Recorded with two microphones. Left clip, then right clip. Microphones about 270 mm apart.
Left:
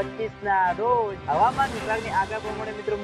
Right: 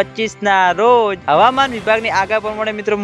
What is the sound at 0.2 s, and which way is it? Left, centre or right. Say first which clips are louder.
Speech: right 8 dB; right.